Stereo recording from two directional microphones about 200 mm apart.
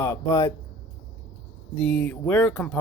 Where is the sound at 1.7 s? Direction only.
5° left (ahead or behind).